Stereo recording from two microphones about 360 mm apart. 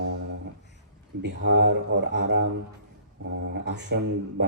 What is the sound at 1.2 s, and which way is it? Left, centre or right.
Speech, right.